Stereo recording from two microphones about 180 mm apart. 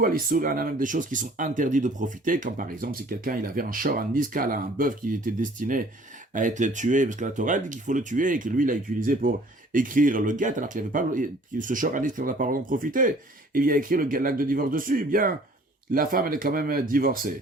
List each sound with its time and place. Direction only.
0.0 s speech: 55° right (ahead or behind)